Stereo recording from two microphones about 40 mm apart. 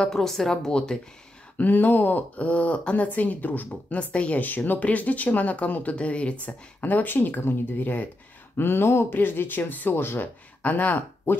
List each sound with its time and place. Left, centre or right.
0.0 s a woman's voice: centre
1.6 s speech: left
4.4 s speech: left
6.4 s speech: left
8.5 s speech: left
9.1 s speech: left
9.9 s speech: left
10.6 s speech: left